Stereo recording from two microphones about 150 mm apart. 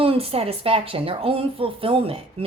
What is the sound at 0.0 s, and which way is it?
A woman's voice, 40° right (ahead or behind).